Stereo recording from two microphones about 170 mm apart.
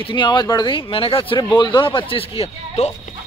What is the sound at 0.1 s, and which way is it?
Speech, 25° left (ahead or behind).